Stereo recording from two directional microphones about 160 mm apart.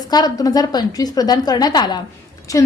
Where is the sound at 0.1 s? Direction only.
25° left (ahead or behind).